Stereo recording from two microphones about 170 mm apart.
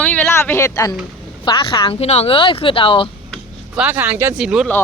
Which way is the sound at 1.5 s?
30° left (ahead or behind).